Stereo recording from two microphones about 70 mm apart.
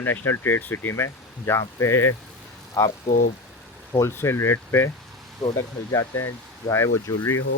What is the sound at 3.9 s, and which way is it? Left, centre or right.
Speech, left.